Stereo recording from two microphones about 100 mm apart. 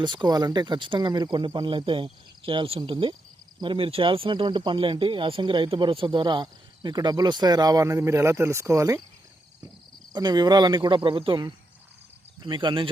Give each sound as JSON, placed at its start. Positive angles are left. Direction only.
{"t": 0.0, "sound": "speech", "side_deg": -50}
{"t": 10.1, "sound": "speech", "side_deg": -45}
{"t": 12.4, "sound": "speech", "side_deg": -50}